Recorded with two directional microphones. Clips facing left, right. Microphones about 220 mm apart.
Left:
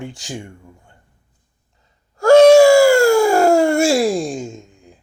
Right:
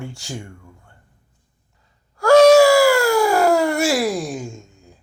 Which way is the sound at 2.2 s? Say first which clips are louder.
Left 3 dB; 25° left (ahead or behind).